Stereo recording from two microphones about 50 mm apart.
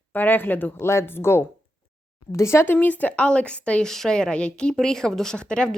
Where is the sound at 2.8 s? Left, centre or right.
Left.